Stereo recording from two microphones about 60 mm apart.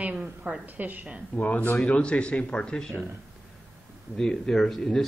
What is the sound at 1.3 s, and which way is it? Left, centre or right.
Speech, left.